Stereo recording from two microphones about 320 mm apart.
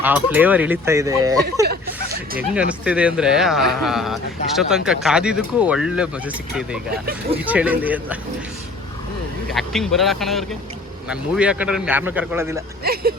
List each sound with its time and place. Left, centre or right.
0.0 s speech: centre
1.6 s speech: right
2.5 s speech: centre
6.9 s speech: right
7.3 s speech: centre
9.5 s speech: centre
12.8 s speech: right